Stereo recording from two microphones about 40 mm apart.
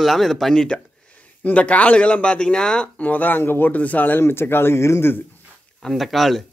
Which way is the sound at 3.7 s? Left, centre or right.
Left.